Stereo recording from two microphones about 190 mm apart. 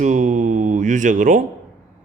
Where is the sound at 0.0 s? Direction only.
40° right (ahead or behind).